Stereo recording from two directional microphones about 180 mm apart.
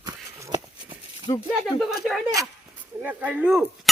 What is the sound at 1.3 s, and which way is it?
Speech, 25° left (ahead or behind).